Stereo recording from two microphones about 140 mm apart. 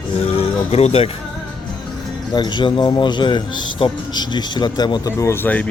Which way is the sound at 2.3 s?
30° left (ahead or behind).